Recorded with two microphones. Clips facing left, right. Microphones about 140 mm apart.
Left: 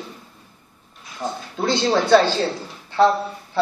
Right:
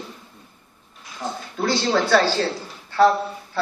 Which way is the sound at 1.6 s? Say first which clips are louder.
Left 1 dB; 20° left (ahead or behind).